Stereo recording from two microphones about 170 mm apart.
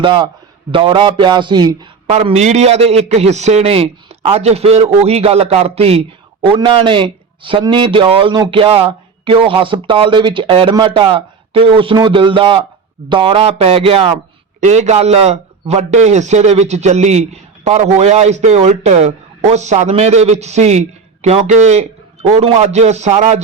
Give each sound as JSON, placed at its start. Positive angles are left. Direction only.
{"t": 0.0, "sound": "a man's voice", "side_deg": -30}
{"t": 2.0, "sound": "a man's voice", "side_deg": -40}